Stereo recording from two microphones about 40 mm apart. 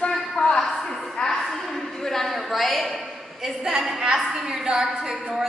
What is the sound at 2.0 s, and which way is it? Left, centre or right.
Speech, centre.